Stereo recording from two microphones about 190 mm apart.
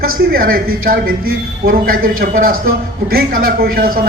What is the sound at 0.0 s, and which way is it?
A woman's voice, 50° right (ahead or behind).